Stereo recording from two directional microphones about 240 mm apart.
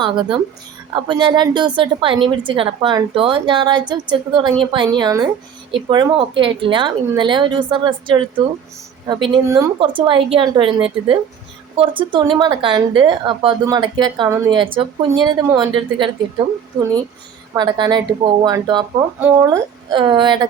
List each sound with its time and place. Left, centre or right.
0.0 s a woman's voice: centre
17.5 s speech: centre